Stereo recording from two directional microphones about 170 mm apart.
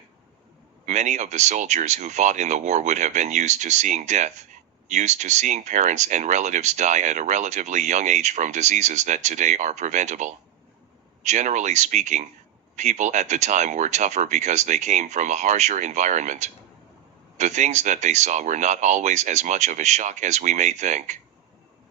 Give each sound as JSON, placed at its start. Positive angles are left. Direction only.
{"t": 0.9, "sound": "speech", "side_deg": -45}